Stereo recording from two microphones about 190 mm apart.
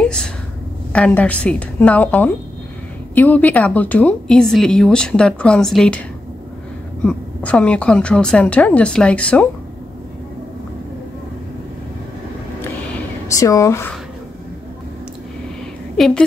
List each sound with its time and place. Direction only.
0.0 s a sound: 5° left (ahead or behind)
0.9 s a woman's voice: 5° left (ahead or behind)
7.1 s a woman's voice: 5° left (ahead or behind)
13.4 s a woman's voice: 15° left (ahead or behind)